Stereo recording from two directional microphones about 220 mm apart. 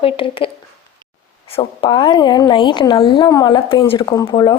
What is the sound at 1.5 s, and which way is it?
Speech, 20° left (ahead or behind).